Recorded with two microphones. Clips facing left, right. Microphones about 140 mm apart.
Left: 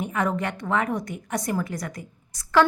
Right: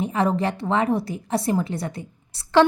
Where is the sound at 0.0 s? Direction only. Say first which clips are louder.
Right 4 dB; 30° right (ahead or behind).